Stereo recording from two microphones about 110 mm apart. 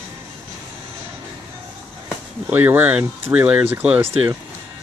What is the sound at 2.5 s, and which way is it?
Speech, 20° right (ahead or behind).